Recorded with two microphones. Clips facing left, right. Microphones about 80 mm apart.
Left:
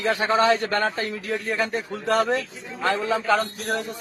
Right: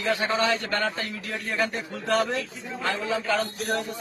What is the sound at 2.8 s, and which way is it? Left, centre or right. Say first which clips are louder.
Speech: left 5 dB; left.